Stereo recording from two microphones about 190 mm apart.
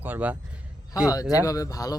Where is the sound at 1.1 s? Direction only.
20° left (ahead or behind).